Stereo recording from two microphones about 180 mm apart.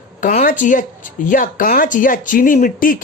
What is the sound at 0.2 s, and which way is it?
Speech, 45° left (ahead or behind).